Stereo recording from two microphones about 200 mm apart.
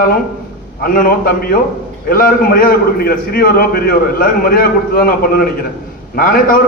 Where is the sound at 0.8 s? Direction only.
45° left (ahead or behind).